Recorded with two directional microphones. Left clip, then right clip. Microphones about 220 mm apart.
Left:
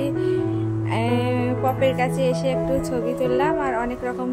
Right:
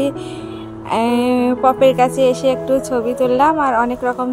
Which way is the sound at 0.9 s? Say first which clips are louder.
Right 8 dB; 15° right (ahead or behind).